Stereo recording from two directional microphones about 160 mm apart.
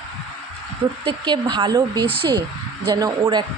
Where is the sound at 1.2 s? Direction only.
25° right (ahead or behind).